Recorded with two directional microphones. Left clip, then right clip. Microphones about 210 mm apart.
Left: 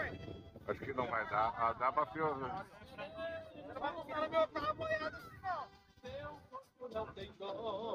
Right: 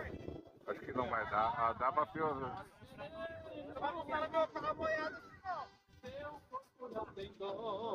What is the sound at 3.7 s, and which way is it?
Speech, 40° left (ahead or behind).